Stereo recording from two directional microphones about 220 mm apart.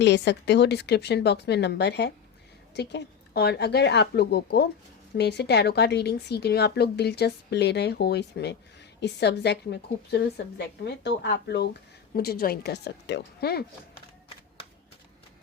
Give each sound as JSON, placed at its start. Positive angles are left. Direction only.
{"t": 0.0, "sound": "a woman's voice", "side_deg": 50}